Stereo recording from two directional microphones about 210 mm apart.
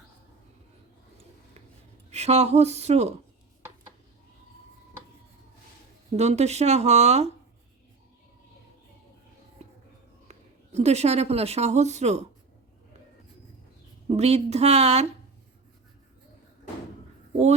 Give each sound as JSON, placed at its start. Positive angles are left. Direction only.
{"t": 2.0, "sound": "speech", "side_deg": -30}
{"t": 6.1, "sound": "speech", "side_deg": -30}
{"t": 10.2, "sound": "a woman's voice", "side_deg": -30}
{"t": 14.1, "sound": "speech", "side_deg": -30}